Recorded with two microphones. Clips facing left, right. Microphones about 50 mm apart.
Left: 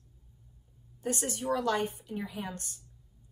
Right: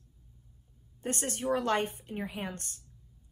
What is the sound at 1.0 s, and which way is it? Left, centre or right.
A woman's voice, right.